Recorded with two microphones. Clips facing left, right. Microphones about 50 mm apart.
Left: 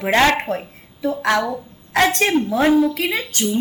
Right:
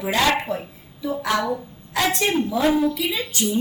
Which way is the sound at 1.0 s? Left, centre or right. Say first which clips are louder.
Left 4 dB; left.